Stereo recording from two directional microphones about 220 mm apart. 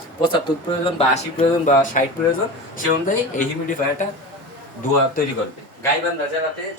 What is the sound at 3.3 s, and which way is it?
Speech, 35° left (ahead or behind).